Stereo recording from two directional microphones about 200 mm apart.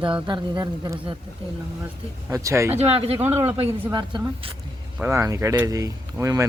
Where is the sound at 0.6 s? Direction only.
15° right (ahead or behind).